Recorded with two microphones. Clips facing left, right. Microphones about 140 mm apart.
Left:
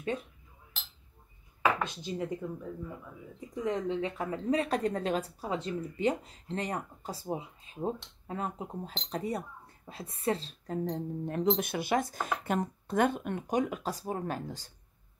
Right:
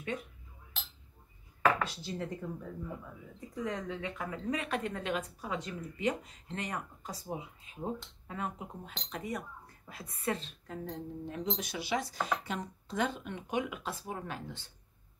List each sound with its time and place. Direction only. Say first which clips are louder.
1.6 s chopping: even; 20° left (ahead or behind)
3.3 s a woman's voice: left 5 dB; 20° left (ahead or behind)
10.9 s speech: left 6 dB; 55° left (ahead or behind)